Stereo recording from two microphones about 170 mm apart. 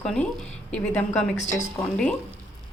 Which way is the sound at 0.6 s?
10° left (ahead or behind).